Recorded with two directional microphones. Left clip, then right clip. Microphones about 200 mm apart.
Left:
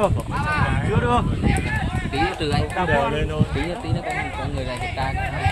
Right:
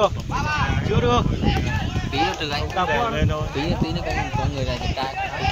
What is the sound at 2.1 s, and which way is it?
Speech, 50° right (ahead or behind).